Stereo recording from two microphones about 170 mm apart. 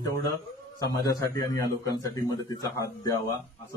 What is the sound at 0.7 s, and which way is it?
A man's voice, 25° left (ahead or behind).